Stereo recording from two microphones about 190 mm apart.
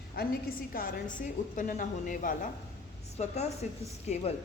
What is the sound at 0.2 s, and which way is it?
A woman's voice, 50° left (ahead or behind).